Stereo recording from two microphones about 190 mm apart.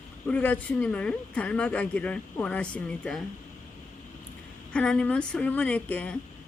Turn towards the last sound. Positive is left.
turn(degrees=10)  # may be behind; listen again after turning